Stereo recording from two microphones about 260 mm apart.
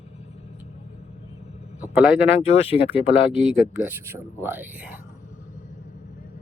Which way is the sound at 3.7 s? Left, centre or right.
Centre.